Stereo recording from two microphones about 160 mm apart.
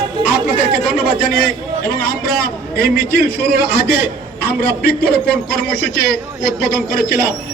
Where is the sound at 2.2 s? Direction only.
70° left (ahead or behind).